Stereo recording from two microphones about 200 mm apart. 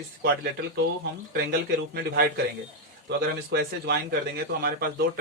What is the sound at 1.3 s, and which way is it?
Speech, 50° right (ahead or behind).